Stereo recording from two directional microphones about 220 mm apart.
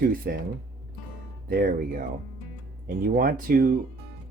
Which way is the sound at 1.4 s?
40° right (ahead or behind).